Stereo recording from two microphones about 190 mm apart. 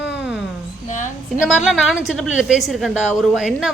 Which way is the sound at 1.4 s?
Centre (ahead or behind).